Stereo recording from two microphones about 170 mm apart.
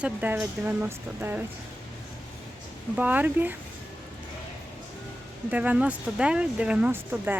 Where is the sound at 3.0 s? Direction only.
10° right (ahead or behind).